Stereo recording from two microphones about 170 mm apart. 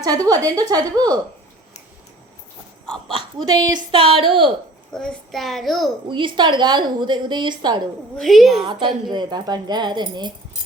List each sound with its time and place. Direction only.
0.0 s a woman's voice: 20° right (ahead or behind)
3.1 s speech: 30° right (ahead or behind)
4.9 s a child's voice: centre (ahead or behind)
6.1 s a woman's voice: 30° right (ahead or behind)
8.1 s a child's voice: centre (ahead or behind)
9.0 s a woman's voice: 25° right (ahead or behind)